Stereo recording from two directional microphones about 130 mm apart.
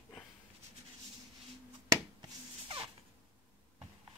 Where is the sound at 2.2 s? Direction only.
40° right (ahead or behind).